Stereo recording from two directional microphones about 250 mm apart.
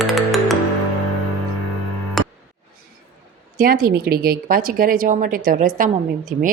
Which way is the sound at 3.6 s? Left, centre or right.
Right.